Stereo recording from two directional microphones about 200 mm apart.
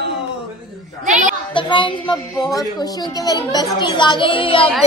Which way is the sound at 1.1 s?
40° right (ahead or behind).